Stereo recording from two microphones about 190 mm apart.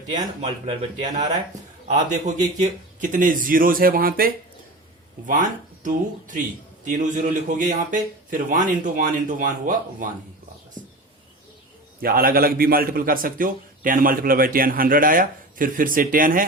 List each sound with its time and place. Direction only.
0.6 s a man's voice: 30° right (ahead or behind); by 4.3 s 50° right (ahead or behind)
5.8 s a man's voice: 45° right (ahead or behind)
11.9 s a man's voice: 50° right (ahead or behind)